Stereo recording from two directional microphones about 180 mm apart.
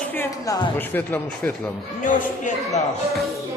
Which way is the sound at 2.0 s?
45° left (ahead or behind).